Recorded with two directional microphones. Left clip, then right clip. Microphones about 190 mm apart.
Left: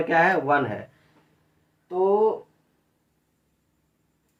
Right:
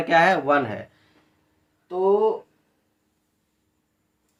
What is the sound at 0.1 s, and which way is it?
Speech, 25° right (ahead or behind).